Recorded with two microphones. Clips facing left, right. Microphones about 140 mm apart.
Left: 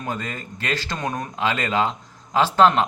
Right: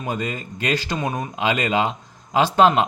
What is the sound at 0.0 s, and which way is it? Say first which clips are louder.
Speech: right 3 dB; 15° right (ahead or behind).